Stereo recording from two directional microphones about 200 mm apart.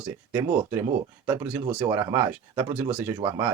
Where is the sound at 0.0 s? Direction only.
10° right (ahead or behind).